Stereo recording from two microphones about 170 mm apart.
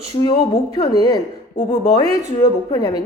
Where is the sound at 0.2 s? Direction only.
30° left (ahead or behind).